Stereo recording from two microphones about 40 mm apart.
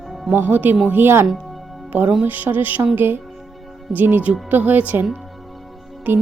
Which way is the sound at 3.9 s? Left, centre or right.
Right.